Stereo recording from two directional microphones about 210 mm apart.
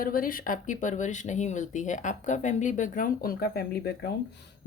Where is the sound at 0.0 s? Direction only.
40° left (ahead or behind).